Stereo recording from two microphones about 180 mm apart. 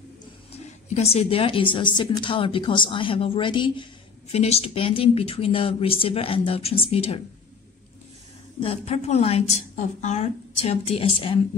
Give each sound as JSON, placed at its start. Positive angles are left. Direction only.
{"t": 0.8, "sound": "a woman's voice", "side_deg": 35}
{"t": 8.5, "sound": "speech", "side_deg": 35}